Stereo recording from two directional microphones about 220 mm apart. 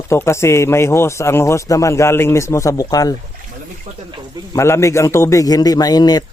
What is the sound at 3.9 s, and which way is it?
Speech, 35° right (ahead or behind).